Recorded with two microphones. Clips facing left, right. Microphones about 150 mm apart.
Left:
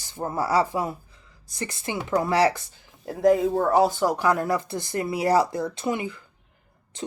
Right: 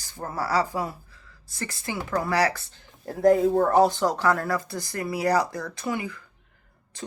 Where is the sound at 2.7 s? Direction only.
Centre (ahead or behind).